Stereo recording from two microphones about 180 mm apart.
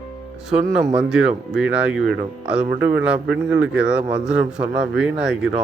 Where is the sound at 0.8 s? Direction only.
5° right (ahead or behind).